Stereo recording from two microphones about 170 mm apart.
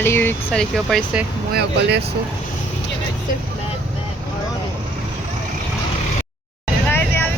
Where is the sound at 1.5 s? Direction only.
90° right.